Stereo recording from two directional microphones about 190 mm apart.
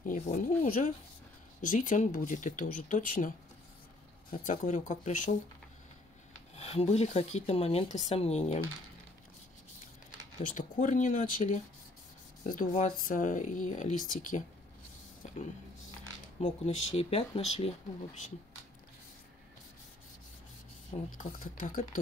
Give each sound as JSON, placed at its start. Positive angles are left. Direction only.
{"t": 0.0, "sound": "speech", "side_deg": 45}
{"t": 4.5, "sound": "speech", "side_deg": 40}
{"t": 6.5, "sound": "speech", "side_deg": 35}
{"t": 10.4, "sound": "speech", "side_deg": 45}
{"t": 15.2, "sound": "a sound", "side_deg": 40}
{"t": 16.3, "sound": "speech", "side_deg": 35}
{"t": 21.2, "sound": "speech", "side_deg": 45}